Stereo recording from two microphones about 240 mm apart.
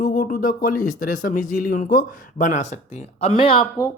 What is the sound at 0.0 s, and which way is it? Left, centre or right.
Speech, left.